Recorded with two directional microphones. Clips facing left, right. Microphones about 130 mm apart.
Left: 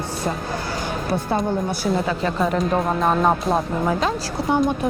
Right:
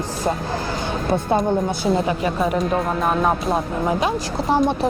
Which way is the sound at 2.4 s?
5° right (ahead or behind).